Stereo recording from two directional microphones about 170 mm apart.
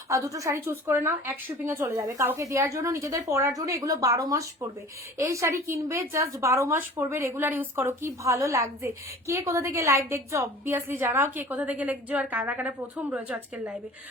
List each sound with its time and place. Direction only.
0.1 s a woman's voice: 20° right (ahead or behind)